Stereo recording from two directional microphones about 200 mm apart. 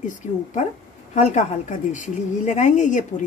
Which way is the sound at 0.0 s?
40° left (ahead or behind).